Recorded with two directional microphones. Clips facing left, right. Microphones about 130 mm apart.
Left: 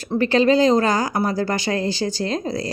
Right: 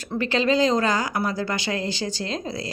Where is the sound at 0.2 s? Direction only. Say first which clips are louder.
Left 5 dB; 40° left (ahead or behind).